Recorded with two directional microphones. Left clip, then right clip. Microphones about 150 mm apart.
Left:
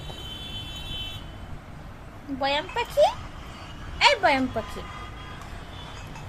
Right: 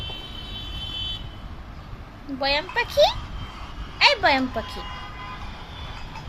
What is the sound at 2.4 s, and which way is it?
Speech, 10° left (ahead or behind).